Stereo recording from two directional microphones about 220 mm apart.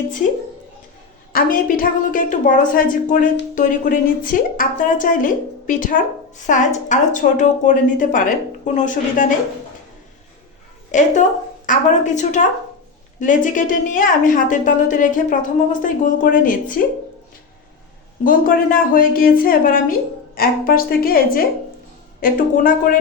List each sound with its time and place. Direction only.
1.3 s a woman's voice: 40° left (ahead or behind)
10.9 s a woman's voice: 35° left (ahead or behind)
18.2 s a woman's voice: 40° left (ahead or behind)